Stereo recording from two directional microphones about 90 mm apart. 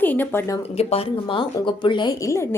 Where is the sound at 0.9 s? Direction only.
80° left.